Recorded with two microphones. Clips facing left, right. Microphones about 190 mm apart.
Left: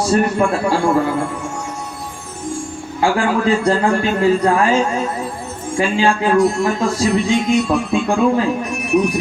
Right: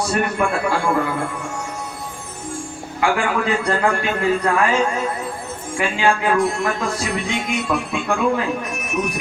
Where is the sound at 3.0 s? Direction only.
30° left (ahead or behind).